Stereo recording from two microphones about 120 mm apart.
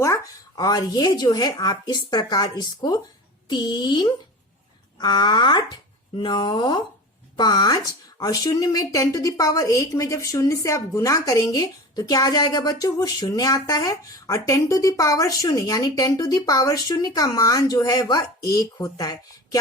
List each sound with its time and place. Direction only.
0.5 s a woman's voice: 35° left (ahead or behind)